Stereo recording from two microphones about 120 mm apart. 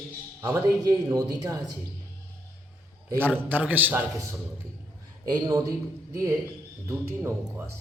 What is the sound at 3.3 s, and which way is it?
A man's voice, 15° right (ahead or behind).